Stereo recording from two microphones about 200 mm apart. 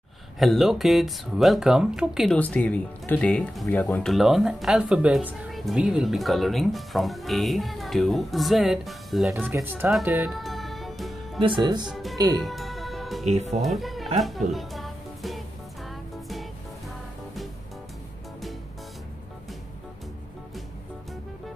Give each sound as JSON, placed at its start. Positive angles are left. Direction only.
{"t": 0.4, "sound": "speech", "side_deg": 0}
{"t": 11.4, "sound": "speech", "side_deg": -25}
{"t": 11.9, "sound": "speech", "side_deg": 0}
{"t": 12.4, "sound": "music", "side_deg": 0}
{"t": 13.3, "sound": "speech", "side_deg": -35}
{"t": 13.6, "sound": "music", "side_deg": 0}